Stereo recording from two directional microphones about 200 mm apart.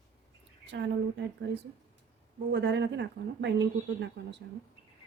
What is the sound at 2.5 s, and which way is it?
Speech, 60° right (ahead or behind).